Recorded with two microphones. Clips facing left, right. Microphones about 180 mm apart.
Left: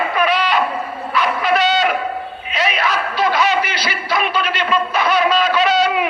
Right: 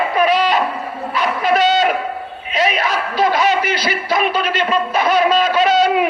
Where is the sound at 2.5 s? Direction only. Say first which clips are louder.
Right 2 dB; 45° right (ahead or behind).